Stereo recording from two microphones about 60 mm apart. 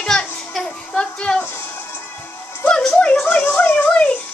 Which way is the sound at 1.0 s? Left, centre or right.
Centre.